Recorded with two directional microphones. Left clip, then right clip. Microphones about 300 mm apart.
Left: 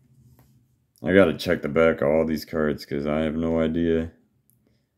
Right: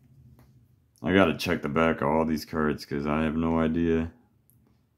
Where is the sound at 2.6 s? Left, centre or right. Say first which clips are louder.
Left 3 dB; right.